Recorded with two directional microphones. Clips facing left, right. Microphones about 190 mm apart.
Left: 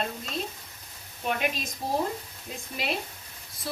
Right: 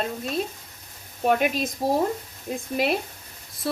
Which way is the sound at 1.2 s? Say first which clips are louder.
Right 8 dB; 50° right (ahead or behind).